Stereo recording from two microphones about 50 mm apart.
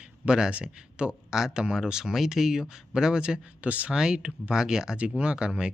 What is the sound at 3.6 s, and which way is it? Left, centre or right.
Speech, right.